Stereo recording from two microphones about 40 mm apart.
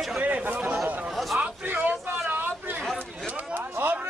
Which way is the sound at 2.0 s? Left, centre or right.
Right.